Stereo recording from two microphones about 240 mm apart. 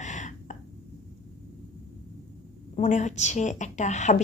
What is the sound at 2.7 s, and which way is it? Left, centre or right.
A woman's voice, left.